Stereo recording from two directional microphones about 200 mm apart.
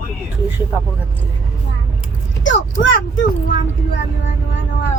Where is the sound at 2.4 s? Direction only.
70° left (ahead or behind).